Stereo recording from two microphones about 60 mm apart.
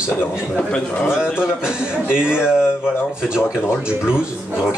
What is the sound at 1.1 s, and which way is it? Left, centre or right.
Speech, centre.